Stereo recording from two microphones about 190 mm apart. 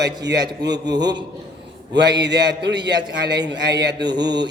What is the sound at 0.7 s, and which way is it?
Speech, 20° right (ahead or behind).